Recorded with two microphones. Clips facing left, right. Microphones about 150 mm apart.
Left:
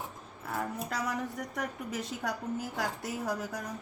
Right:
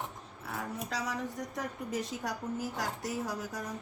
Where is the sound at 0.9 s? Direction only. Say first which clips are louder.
Left 2 dB; 50° left (ahead or behind).